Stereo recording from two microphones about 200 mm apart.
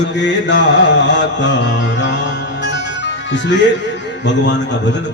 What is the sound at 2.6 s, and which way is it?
Music, 60° left (ahead or behind).